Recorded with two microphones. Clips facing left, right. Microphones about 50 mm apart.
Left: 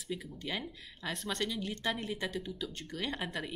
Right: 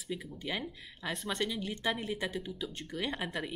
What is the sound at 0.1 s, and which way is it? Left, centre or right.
A woman's voice, centre.